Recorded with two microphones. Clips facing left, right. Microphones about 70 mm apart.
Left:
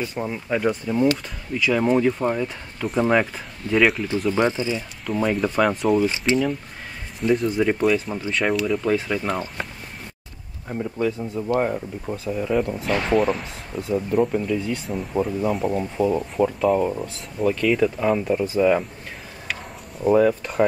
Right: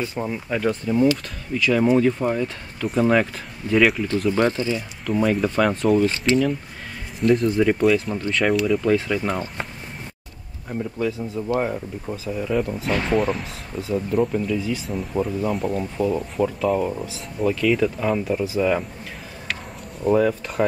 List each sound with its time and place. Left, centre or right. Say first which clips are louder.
0.1 s speech: left 1 dB; centre
10.7 s speech: left 1 dB; centre
20.0 s speech: left 2 dB; centre